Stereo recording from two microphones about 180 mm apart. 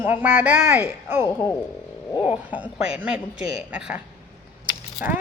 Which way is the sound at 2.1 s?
30° left (ahead or behind).